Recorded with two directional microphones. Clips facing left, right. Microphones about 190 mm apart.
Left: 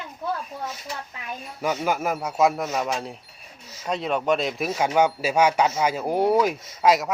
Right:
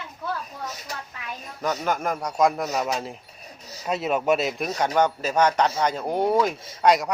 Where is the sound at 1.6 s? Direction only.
10° left (ahead or behind).